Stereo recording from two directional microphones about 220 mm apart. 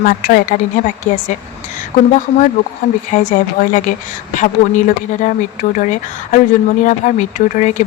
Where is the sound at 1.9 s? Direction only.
35° left (ahead or behind).